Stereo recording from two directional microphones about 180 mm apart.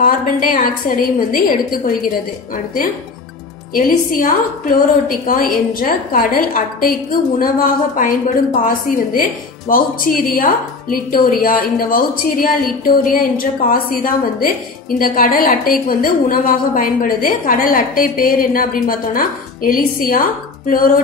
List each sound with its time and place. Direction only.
0.0 s a woman's voice: 50° left (ahead or behind)